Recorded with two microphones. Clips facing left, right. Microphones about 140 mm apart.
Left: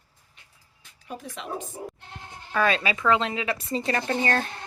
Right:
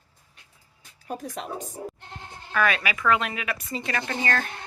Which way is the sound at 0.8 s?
40° right (ahead or behind).